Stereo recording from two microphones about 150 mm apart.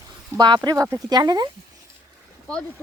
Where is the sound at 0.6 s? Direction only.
20° right (ahead or behind).